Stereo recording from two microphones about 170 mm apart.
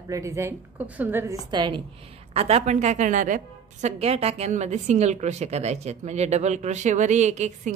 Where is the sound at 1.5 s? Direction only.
25° right (ahead or behind).